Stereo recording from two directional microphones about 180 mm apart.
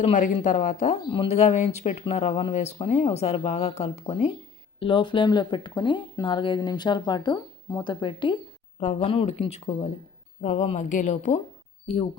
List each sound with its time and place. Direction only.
0.0 s speech: 45° left (ahead or behind)